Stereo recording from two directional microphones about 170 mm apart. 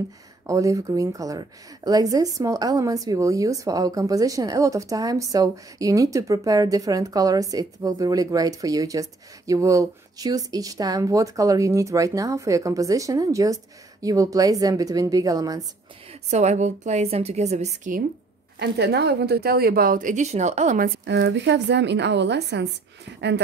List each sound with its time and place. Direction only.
0.5 s a woman's voice: 20° right (ahead or behind)
16.1 s a woman's voice: 40° right (ahead or behind)
18.6 s a woman's voice: 80° right; by 20.9 s 50° right (ahead or behind)
21.0 s a woman's voice: 90° right